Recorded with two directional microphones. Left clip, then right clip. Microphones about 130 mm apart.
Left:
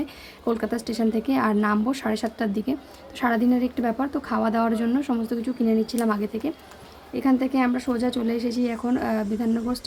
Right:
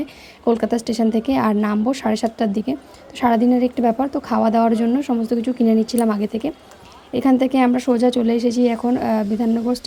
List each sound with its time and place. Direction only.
0.0 s speech: 30° right (ahead or behind)
5.5 s speech: 50° right (ahead or behind); by 9.8 s 25° right (ahead or behind)